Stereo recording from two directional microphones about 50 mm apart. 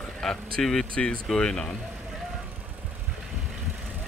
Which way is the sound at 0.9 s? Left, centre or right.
Centre.